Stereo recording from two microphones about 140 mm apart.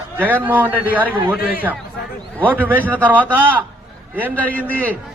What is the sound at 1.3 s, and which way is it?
Speech, 90° left.